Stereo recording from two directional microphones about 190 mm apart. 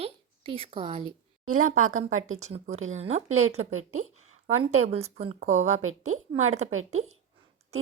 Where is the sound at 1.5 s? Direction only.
40° right (ahead or behind).